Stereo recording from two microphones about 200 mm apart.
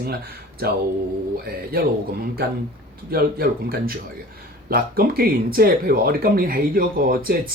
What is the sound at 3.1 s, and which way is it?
Speech, 50° right (ahead or behind).